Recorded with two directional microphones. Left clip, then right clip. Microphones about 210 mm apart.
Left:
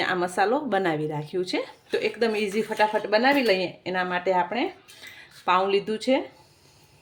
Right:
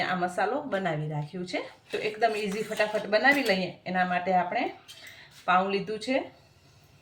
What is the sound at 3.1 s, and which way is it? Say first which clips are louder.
A woman's voice: even; 45° left (ahead or behind).